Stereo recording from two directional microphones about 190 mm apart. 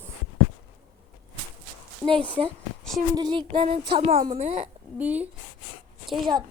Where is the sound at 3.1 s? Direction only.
25° right (ahead or behind).